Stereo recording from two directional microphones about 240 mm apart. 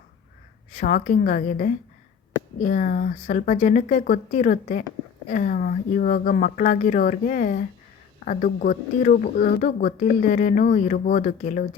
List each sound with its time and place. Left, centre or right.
0.7 s speech: left